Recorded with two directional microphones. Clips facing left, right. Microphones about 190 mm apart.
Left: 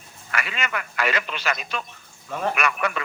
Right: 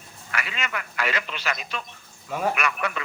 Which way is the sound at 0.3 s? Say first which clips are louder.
Left 2 dB; 55° left (ahead or behind).